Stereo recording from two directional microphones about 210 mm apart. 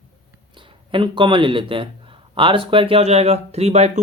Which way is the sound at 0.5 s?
25° right (ahead or behind).